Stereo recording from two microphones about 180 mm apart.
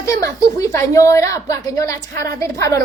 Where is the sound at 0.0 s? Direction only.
20° left (ahead or behind).